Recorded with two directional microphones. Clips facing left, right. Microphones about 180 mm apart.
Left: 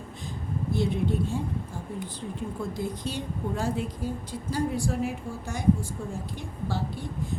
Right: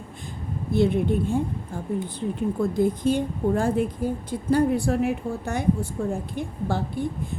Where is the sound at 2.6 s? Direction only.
55° right (ahead or behind).